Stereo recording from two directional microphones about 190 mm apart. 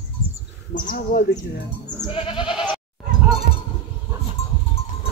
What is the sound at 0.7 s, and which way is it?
Speech, 50° left (ahead or behind).